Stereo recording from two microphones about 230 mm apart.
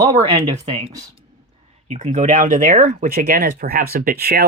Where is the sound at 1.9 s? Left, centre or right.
Right.